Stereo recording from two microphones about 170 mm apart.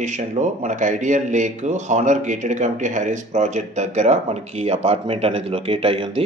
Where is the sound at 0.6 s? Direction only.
45° right (ahead or behind).